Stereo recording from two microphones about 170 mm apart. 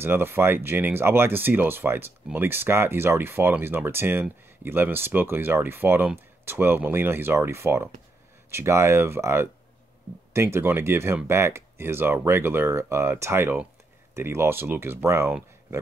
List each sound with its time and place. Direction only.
0.0 s speech: 15° right (ahead or behind)